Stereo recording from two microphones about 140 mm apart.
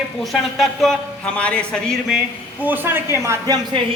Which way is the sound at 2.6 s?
15° right (ahead or behind).